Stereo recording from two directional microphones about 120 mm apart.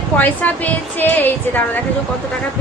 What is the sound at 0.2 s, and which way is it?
A woman's voice, 15° left (ahead or behind).